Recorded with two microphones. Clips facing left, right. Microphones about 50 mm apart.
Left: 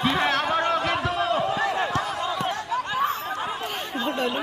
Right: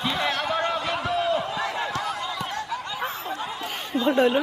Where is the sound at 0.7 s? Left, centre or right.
Left.